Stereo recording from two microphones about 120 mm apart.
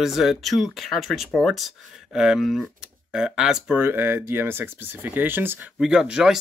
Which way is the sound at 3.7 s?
20° right (ahead or behind).